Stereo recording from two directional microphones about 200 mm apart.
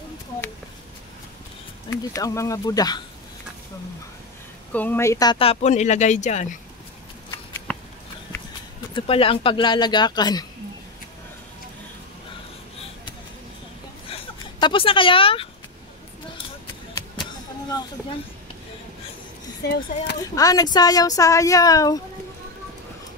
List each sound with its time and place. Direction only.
1.9 s speech: 15° left (ahead or behind)
4.7 s speech: 10° left (ahead or behind); by 6.6 s 40° left (ahead or behind)
7.7 s a sound: 10° left (ahead or behind)
8.9 s speech: 30° left (ahead or behind)
14.1 s speech: 25° left (ahead or behind)
19.6 s speech: 55° left (ahead or behind)
20.3 s speech: 20° left (ahead or behind)